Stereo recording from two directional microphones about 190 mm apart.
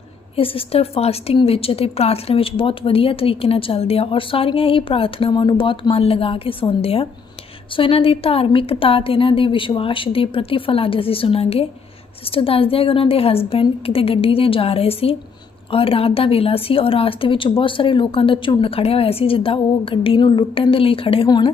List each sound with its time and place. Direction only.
0.3 s a woman's voice: 30° left (ahead or behind)